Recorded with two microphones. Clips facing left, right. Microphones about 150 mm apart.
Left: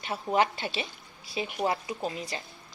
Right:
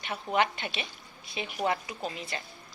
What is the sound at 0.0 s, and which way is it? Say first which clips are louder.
A woman's voice: left 2 dB; 25° left (ahead or behind).